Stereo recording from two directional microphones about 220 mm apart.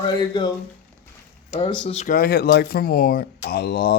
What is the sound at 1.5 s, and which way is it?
Speech, 20° left (ahead or behind).